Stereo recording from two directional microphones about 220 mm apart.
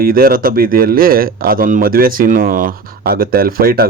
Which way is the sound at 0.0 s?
40° right (ahead or behind).